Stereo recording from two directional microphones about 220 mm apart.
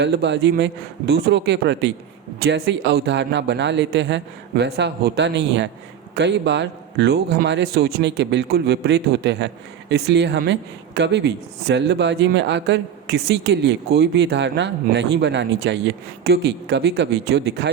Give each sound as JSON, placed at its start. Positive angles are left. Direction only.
{"t": 0.0, "sound": "speech", "side_deg": -50}